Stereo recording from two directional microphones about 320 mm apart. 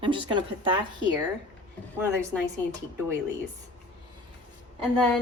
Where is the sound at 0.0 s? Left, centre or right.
Centre.